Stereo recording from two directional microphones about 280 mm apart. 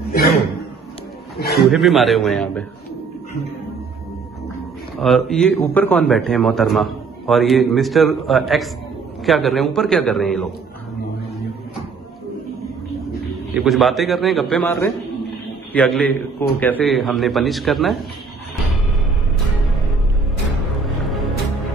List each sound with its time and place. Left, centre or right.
1.6 s a man's voice: centre
4.9 s a man's voice: centre
13.6 s a man's voice: centre
20.8 s music: centre